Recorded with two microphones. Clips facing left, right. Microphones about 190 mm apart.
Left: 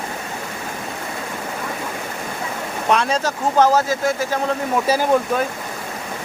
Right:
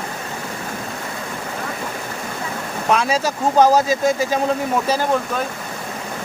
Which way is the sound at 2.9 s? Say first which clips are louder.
Right 1 dB; 5° right (ahead or behind).